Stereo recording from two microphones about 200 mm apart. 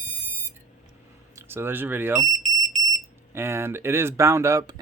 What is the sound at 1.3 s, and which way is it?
Speech, 10° right (ahead or behind).